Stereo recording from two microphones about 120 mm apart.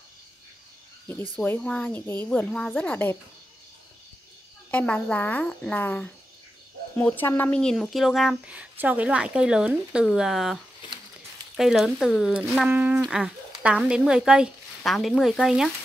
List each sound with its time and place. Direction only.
1.3 s speech: 10° left (ahead or behind)
4.6 s speech: 10° left (ahead or behind)
7.5 s speech: 5° left (ahead or behind)
8.5 s a woman's voice: 10° right (ahead or behind)